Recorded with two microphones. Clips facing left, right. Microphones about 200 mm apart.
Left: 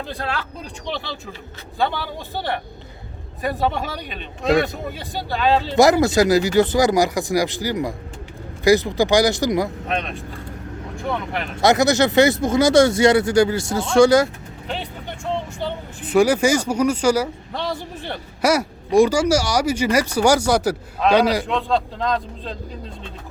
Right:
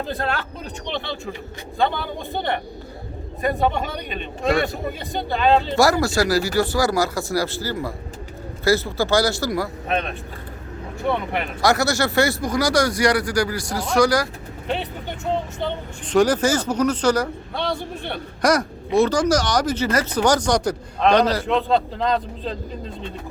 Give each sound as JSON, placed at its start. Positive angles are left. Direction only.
{"t": 0.1, "sound": "a man's voice", "side_deg": 0}
{"t": 5.7, "sound": "speech", "side_deg": 20}
{"t": 9.9, "sound": "a man's voice", "side_deg": 0}
{"t": 11.6, "sound": "speech", "side_deg": 20}
{"t": 14.7, "sound": "vehicle", "side_deg": 0}
{"t": 16.0, "sound": "speech", "side_deg": 10}
{"t": 17.7, "sound": "a man's voice", "side_deg": -60}
{"t": 18.4, "sound": "speech", "side_deg": 10}